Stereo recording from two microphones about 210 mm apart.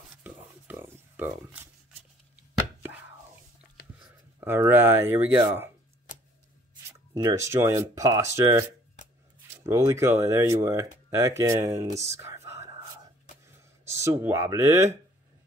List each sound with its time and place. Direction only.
0.2 s a sound: 10° right (ahead or behind)
3.8 s a sound: 45° left (ahead or behind)
4.4 s speech: 10° right (ahead or behind)
7.2 s speech: 15° right (ahead or behind)
12.0 s whispering: 15° right (ahead or behind)
13.8 s speech: 15° right (ahead or behind)